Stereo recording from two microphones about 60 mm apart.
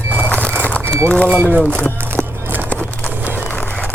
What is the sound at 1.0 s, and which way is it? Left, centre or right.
Speech, centre.